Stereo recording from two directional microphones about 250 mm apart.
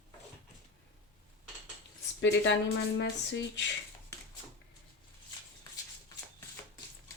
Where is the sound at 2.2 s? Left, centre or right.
Left.